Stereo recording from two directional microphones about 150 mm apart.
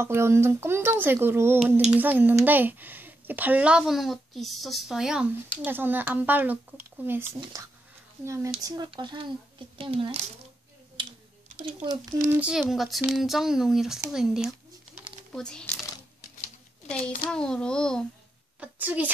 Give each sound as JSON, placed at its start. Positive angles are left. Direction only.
{"t": 0.0, "sound": "a child's voice", "side_deg": -15}
{"t": 11.0, "sound": "typing", "side_deg": -30}
{"t": 12.3, "sound": "speech", "side_deg": -10}
{"t": 17.3, "sound": "speech", "side_deg": 5}
{"t": 18.6, "sound": "a child's voice", "side_deg": -10}